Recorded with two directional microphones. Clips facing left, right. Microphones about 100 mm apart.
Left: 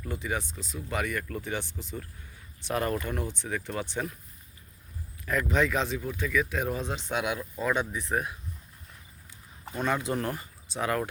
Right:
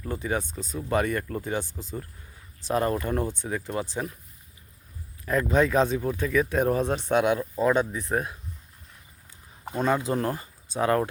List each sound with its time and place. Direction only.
0.0 s speech: 35° right (ahead or behind)
2.6 s speech: 30° right (ahead or behind)
3.5 s speech: 25° right (ahead or behind)
5.2 s speech: 35° right (ahead or behind)
9.6 s speech: 40° right (ahead or behind)